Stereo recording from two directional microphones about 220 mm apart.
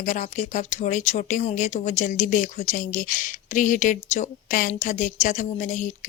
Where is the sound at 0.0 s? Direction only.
35° left (ahead or behind).